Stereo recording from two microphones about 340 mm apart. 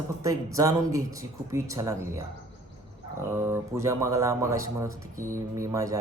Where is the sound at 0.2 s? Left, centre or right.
Centre.